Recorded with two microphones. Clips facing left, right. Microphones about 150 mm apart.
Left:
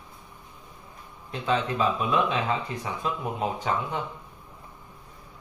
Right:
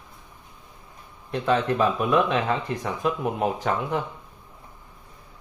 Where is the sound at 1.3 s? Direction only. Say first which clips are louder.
Right 4 dB; 45° right (ahead or behind).